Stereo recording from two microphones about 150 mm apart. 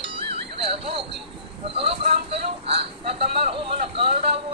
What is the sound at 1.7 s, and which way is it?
Vehicle, 40° right (ahead or behind).